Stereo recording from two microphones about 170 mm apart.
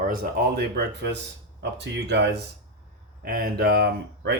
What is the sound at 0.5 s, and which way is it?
Speech, 75° right (ahead or behind).